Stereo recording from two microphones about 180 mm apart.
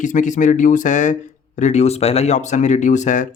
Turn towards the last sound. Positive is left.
turn(degrees=40)  # may be behind; listen again after turning